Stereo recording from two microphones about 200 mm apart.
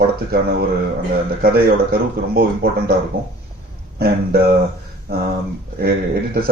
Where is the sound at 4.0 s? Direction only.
50° right (ahead or behind).